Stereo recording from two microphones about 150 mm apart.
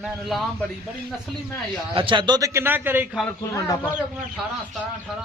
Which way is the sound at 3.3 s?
20° left (ahead or behind).